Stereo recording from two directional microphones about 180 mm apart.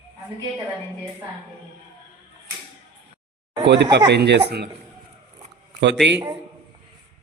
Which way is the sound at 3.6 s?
75° right (ahead or behind).